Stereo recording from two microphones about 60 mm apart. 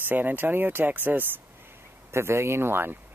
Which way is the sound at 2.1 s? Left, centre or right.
Right.